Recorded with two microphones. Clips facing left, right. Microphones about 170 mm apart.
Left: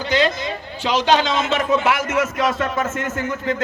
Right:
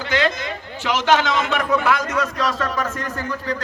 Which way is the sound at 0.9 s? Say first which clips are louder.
Left 1 dB; 15° left (ahead or behind).